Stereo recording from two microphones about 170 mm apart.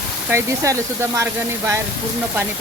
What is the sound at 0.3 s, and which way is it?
Speech, 15° right (ahead or behind).